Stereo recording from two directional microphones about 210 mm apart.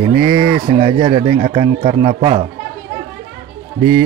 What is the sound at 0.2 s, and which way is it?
Speech, 25° right (ahead or behind).